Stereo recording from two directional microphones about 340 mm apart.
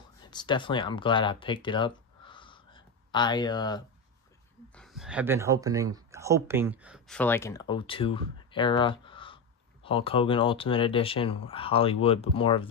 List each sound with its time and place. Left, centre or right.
0.3 s speech: centre
4.7 s speech: centre